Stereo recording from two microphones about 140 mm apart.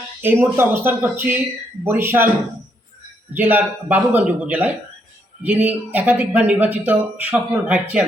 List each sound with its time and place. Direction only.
0.2 s speech: 15° right (ahead or behind)
3.3 s speech: 10° right (ahead or behind)